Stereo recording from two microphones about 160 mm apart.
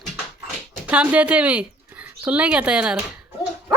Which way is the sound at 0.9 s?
10° right (ahead or behind).